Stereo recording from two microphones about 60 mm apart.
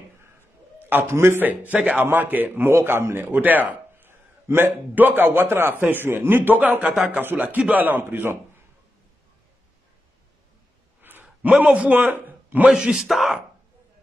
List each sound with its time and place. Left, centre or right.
0.7 s a sound: right
1.0 s a man's voice: right
1.4 s a man's voice: right
2.7 s speech: right
4.1 s a man's voice: right
6.8 s speech: centre
7.1 s a man's voice: right
11.0 s sigh: right
11.5 s a man's voice: centre
12.6 s speech: centre